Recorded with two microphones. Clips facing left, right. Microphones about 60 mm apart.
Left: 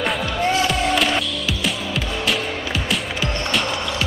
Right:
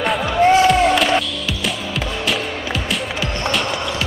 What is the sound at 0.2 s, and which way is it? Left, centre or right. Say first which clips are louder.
Music: right 7 dB; right.